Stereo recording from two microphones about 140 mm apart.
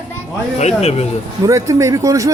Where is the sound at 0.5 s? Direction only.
50° left (ahead or behind).